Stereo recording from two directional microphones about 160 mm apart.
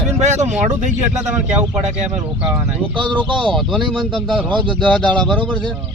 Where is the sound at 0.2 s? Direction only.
45° right (ahead or behind).